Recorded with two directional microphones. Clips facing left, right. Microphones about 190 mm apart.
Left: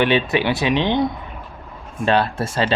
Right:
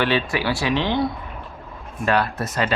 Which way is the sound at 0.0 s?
20° left (ahead or behind).